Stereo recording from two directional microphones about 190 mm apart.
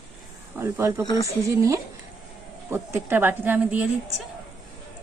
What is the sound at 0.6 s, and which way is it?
A woman's voice, 15° right (ahead or behind).